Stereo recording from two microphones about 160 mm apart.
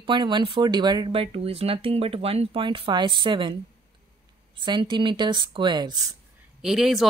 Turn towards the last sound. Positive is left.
turn(degrees=0)  # may be behind; listen again after turning